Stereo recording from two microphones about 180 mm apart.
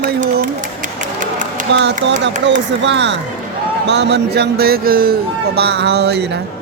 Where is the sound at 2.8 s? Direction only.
80° right.